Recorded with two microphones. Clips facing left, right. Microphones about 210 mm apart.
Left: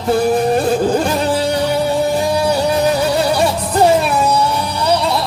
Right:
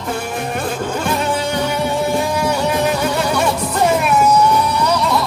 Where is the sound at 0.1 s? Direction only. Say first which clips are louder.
Left 10 dB; 35° left (ahead or behind).